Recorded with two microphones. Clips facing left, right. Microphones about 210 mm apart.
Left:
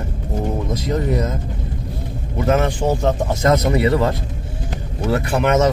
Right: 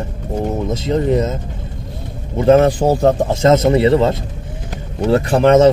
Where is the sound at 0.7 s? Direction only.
25° right (ahead or behind).